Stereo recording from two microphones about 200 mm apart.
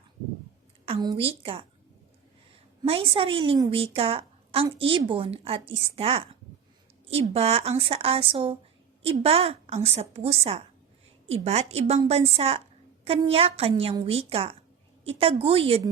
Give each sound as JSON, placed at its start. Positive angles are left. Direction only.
{"t": 0.9, "sound": "a woman's voice", "side_deg": -30}
{"t": 2.8, "sound": "a woman's voice", "side_deg": -25}